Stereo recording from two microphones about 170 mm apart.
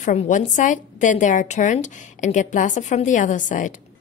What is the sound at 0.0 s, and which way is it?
Speech, 45° left (ahead or behind).